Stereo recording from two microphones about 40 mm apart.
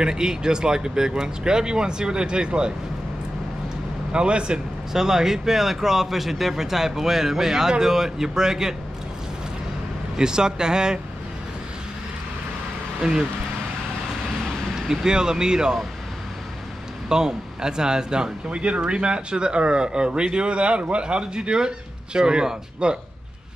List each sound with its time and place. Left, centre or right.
0.0 s speech: centre
4.1 s speech: right
4.9 s speech: centre
10.1 s speech: centre
13.0 s speech: centre
14.9 s speech: centre
17.1 s speech: centre